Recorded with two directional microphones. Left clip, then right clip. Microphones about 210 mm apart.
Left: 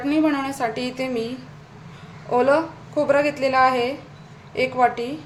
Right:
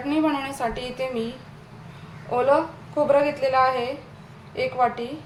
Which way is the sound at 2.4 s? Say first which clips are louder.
Left 1 dB; 20° left (ahead or behind).